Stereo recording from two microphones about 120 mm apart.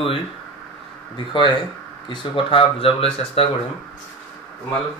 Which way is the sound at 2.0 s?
45° left (ahead or behind).